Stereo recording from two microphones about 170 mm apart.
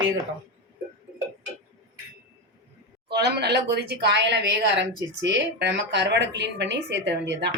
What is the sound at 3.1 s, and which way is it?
A woman's voice, 70° right (ahead or behind).